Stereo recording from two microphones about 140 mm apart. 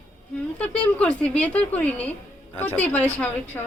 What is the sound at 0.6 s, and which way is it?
Speech, 10° left (ahead or behind).